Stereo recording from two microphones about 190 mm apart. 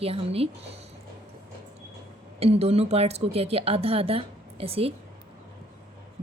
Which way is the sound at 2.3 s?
35° right (ahead or behind).